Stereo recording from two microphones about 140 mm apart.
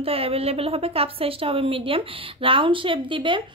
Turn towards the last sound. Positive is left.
turn(degrees=-35)  # may be behind; listen again after turning